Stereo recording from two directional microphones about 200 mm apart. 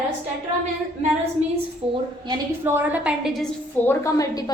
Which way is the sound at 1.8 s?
30° right (ahead or behind).